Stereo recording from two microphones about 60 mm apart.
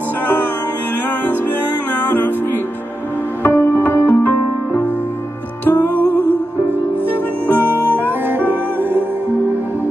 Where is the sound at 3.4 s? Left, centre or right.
Left.